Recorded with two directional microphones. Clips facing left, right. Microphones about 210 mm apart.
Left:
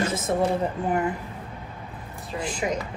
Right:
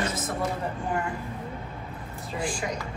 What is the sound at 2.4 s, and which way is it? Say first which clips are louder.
Speech: left 3 dB; 20° left (ahead or behind).